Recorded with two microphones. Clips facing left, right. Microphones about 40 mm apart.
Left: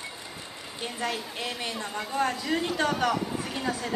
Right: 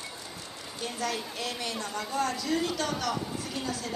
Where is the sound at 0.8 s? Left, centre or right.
Left.